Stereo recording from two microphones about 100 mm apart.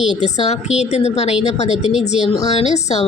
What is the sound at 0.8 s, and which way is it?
Speech, 90° left.